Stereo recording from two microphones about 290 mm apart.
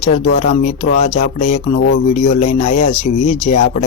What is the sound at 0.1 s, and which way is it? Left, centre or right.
Speech, left.